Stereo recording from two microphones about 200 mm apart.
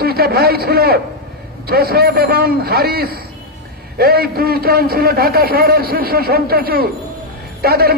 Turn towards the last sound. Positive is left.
turn(degrees=-50)  # may be behind; listen again after turning